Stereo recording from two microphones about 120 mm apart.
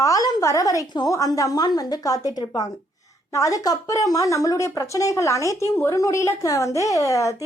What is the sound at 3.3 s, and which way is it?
Speech, 30° left (ahead or behind).